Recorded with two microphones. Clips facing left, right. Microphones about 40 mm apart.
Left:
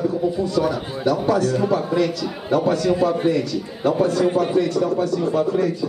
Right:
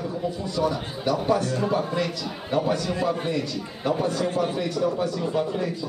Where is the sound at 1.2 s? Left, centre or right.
Centre.